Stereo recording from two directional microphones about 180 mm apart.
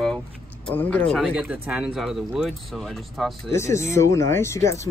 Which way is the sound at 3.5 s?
15° left (ahead or behind).